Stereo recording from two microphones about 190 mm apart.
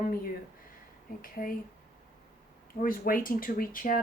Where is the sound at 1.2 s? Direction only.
50° left (ahead or behind).